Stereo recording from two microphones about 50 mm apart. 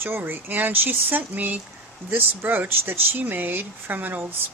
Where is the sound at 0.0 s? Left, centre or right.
Right.